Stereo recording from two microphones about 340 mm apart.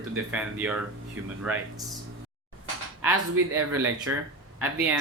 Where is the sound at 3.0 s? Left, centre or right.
Centre.